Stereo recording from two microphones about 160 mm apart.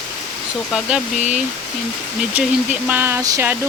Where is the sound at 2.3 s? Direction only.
10° right (ahead or behind).